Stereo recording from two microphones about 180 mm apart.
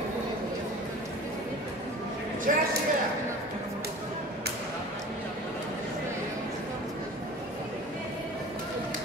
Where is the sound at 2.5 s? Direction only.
50° right (ahead or behind).